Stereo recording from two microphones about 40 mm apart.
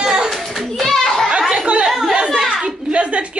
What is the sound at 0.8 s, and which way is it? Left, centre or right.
Children playing, centre.